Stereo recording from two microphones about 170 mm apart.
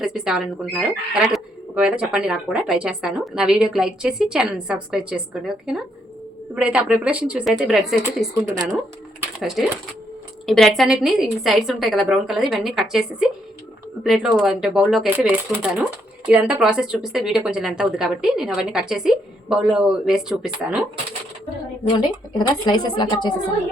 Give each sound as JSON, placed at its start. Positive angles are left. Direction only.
{"t": 0.0, "sound": "speech", "side_deg": -5}
{"t": 8.5, "sound": "speech", "side_deg": -15}
{"t": 9.4, "sound": "speech", "side_deg": 0}
{"t": 21.9, "sound": "a woman's voice", "side_deg": 25}